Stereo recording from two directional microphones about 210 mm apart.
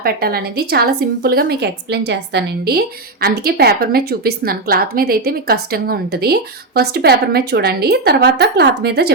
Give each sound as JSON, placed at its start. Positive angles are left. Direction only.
{"t": 0.0, "sound": "a woman's voice", "side_deg": -45}